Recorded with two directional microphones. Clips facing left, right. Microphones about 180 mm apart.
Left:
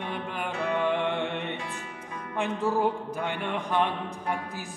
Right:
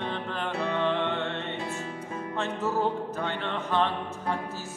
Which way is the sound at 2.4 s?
15° left (ahead or behind).